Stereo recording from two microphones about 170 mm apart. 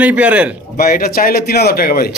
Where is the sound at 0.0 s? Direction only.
10° right (ahead or behind).